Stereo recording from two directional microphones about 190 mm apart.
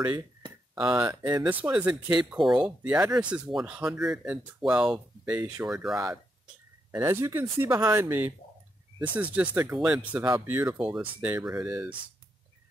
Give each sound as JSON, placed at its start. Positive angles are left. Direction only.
{"t": 0.1, "sound": "a sound", "side_deg": -25}
{"t": 1.0, "sound": "speech", "side_deg": -15}
{"t": 1.4, "sound": "speech", "side_deg": -5}
{"t": 1.9, "sound": "speech", "side_deg": -25}
{"t": 2.3, "sound": "speech", "side_deg": 0}
{"t": 7.0, "sound": "speech", "side_deg": -15}